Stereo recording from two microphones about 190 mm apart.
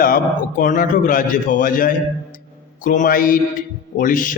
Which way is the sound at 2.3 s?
45° left (ahead or behind).